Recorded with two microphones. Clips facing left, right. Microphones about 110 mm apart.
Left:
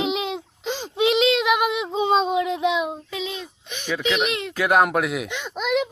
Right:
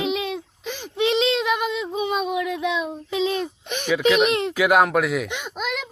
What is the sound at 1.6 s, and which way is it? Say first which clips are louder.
Female singing: left 2 dB; 15° left (ahead or behind).